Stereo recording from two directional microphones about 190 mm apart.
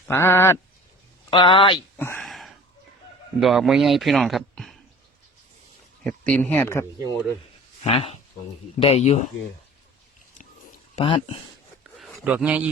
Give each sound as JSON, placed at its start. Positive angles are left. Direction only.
{"t": 0.1, "sound": "speech", "side_deg": 10}
{"t": 1.3, "sound": "speech", "side_deg": 25}
{"t": 2.0, "sound": "a sound", "side_deg": 10}
{"t": 2.2, "sound": "a sound", "side_deg": 0}
{"t": 3.4, "sound": "a man's voice", "side_deg": 0}
{"t": 6.0, "sound": "speech", "side_deg": 5}
{"t": 7.9, "sound": "speech", "side_deg": 30}
{"t": 10.9, "sound": "speech", "side_deg": 30}
{"t": 11.8, "sound": "a sound", "side_deg": -5}